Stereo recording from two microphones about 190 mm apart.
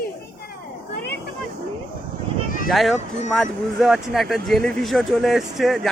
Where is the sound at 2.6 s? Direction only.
Centre (ahead or behind).